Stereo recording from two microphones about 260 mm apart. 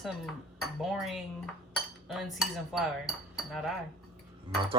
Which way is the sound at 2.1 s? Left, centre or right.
Centre.